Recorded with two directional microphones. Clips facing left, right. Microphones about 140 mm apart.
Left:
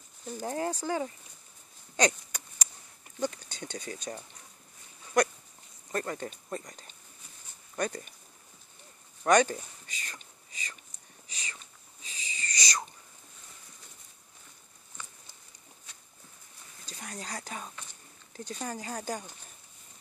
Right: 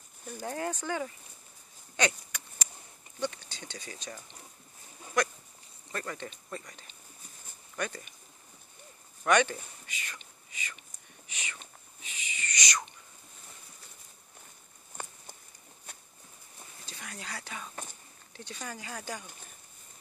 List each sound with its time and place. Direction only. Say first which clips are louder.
0.4 s speech: left 2 dB; 25° left (ahead or behind)
2.0 s a sound: left 3 dB; 40° left (ahead or behind)
3.2 s speech: left 2 dB; 45° left (ahead or behind)
5.9 s speech: left 4 dB; 40° left (ahead or behind)
9.2 s whispering: left 2 dB; 40° left (ahead or behind)
12.0 s wheeze: even; 35° left (ahead or behind)
16.8 s speech: left 3 dB; 40° left (ahead or behind)